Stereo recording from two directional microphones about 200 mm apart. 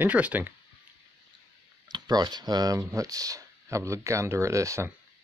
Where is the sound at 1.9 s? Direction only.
20° right (ahead or behind).